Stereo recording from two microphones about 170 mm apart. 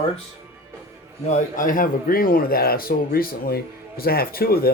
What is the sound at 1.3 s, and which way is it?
Speech, 50° left (ahead or behind).